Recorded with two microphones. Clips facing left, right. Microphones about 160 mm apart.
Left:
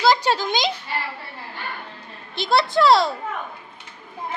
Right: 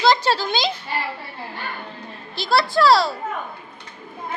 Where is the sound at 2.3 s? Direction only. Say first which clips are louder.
Even; 20° left (ahead or behind).